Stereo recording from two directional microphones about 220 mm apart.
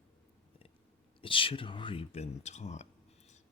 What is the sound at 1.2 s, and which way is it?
Speech, 25° left (ahead or behind).